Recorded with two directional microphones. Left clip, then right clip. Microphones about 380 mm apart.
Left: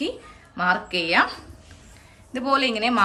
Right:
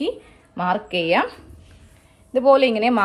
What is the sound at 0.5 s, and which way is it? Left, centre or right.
Speech, centre.